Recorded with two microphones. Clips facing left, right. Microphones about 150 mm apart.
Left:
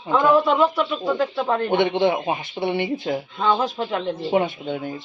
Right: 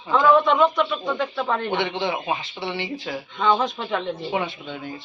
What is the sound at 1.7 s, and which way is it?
Speech, 50° left (ahead or behind).